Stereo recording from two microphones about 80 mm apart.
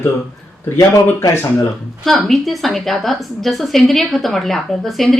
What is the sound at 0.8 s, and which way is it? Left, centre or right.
Speech, left.